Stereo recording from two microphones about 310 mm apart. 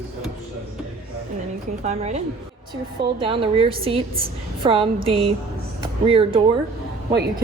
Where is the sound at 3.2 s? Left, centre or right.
Centre.